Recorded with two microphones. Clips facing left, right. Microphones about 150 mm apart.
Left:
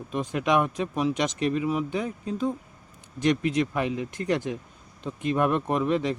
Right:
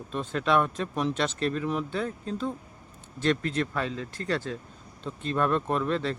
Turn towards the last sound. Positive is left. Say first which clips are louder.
# left 3 dB
turn(degrees=15)  # may be behind; listen again after turning